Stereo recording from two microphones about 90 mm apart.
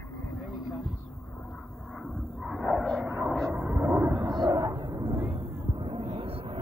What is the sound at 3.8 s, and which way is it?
Vehicle, 30° right (ahead or behind).